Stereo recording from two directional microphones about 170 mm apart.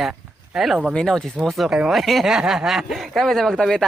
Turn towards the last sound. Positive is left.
turn(degrees=5)  # may be behind; listen again after turning